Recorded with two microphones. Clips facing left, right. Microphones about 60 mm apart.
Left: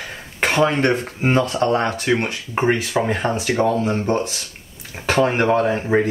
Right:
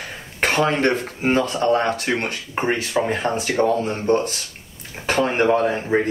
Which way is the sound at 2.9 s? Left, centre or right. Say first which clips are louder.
Left 1 dB; centre.